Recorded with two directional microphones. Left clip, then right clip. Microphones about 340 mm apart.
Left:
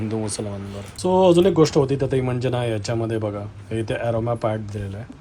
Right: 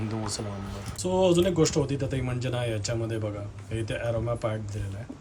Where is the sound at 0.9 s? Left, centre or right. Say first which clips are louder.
Left 7 dB; centre.